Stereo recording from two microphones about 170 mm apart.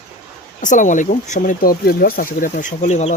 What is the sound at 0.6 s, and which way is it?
Speech, 45° left (ahead or behind).